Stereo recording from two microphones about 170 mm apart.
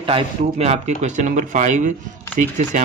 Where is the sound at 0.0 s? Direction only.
30° right (ahead or behind).